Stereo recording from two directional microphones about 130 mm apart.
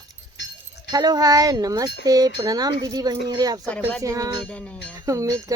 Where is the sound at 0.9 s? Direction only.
30° right (ahead or behind).